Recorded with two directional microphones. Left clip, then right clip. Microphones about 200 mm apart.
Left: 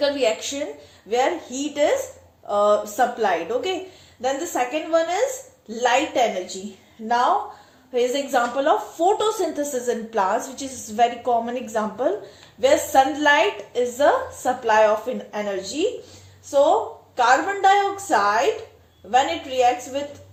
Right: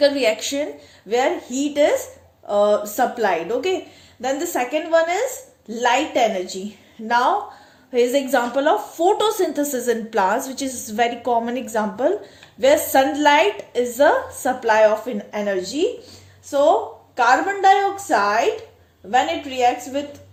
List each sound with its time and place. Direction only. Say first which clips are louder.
0.0 s a woman's voice: right 4 dB; 40° right (ahead or behind)
7.9 s a woman's voice: right 3 dB; 45° right (ahead or behind)
17.2 s a woman's voice: right 1 dB; 40° right (ahead or behind)